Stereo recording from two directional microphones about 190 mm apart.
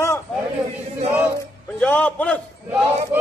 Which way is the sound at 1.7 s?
5° left (ahead or behind).